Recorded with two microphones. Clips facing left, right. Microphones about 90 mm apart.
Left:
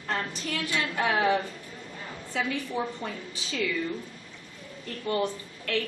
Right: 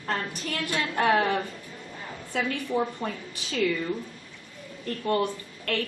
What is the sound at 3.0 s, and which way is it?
Speech, 50° right (ahead or behind).